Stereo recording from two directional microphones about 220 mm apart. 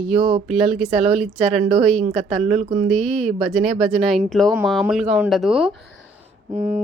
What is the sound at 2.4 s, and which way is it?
Speech, 30° right (ahead or behind).